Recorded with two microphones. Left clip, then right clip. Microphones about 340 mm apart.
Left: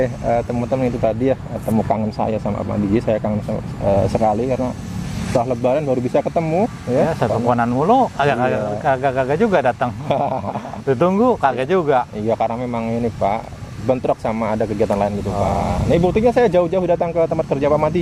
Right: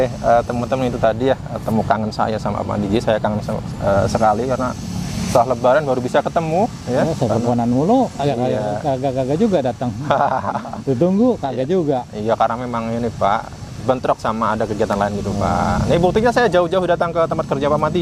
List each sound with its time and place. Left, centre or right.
0.0 s speech: right
3.1 s speech: right
3.8 s speech: right
5.5 s speech: right
7.2 s speech: left
10.1 s speech: right
10.8 s speech: left
12.3 s speech: right